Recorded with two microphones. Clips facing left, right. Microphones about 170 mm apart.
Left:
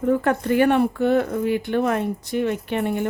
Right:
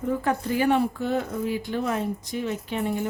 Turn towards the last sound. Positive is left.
turn(degrees=65)  # may be behind; listen again after turning